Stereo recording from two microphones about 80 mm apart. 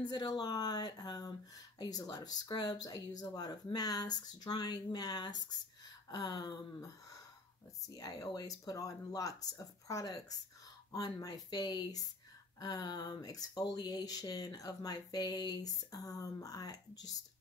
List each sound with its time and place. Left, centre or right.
0.0 s speech: left
7.9 s speech: left